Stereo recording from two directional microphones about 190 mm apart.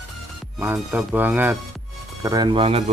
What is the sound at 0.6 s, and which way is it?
Speech, 10° right (ahead or behind).